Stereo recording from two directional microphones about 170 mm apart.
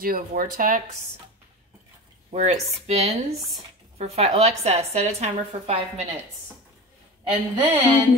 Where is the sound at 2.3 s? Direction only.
40° right (ahead or behind).